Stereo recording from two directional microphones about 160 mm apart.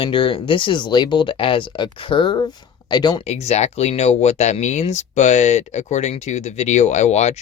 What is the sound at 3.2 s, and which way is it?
Speech, 40° left (ahead or behind).